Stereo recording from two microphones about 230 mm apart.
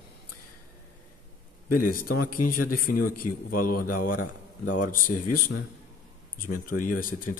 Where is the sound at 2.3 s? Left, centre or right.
Left.